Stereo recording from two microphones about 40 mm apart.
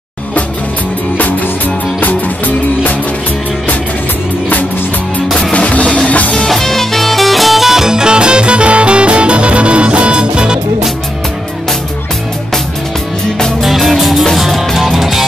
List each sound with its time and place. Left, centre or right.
2.0 s music: left
5.4 s music: left
6.5 s music: centre
13.6 s music: centre